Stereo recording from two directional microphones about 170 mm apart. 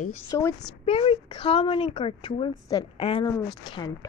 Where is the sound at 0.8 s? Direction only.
35° left (ahead or behind).